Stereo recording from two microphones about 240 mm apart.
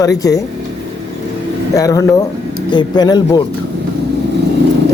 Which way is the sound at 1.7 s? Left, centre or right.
Centre.